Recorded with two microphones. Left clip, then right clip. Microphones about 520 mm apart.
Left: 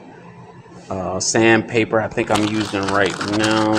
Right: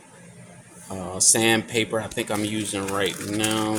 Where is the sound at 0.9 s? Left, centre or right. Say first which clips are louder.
Left 4 dB; right.